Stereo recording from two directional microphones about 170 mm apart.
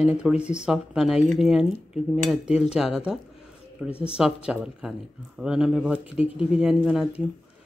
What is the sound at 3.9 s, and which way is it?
Speech, 35° left (ahead or behind).